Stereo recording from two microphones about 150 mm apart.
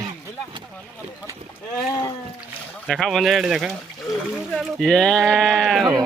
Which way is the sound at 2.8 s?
5° left (ahead or behind).